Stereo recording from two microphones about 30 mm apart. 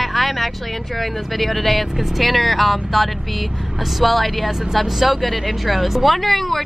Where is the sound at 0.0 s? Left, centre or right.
Centre.